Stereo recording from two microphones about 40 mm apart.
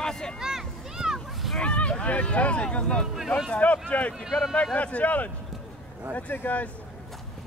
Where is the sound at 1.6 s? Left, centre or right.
Left.